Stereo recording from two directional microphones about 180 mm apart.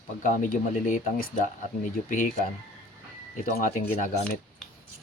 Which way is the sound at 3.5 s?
55° left (ahead or behind).